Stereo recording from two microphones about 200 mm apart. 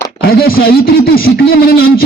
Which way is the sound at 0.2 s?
50° left (ahead or behind).